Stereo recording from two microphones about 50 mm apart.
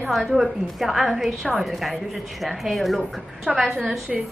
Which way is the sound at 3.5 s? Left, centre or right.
Right.